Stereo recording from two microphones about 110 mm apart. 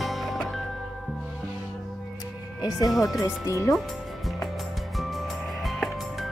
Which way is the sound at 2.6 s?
35° left (ahead or behind).